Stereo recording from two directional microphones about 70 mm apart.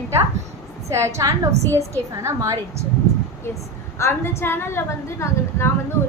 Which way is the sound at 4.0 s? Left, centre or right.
Left.